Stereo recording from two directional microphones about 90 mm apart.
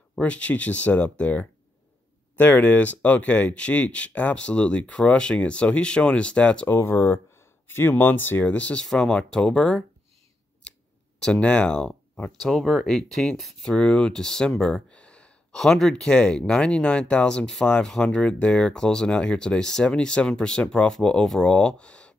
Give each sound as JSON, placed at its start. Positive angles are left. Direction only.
{"t": 0.1, "sound": "speech", "side_deg": 15}
{"t": 6.7, "sound": "speech", "side_deg": 25}
{"t": 11.1, "sound": "speech", "side_deg": 10}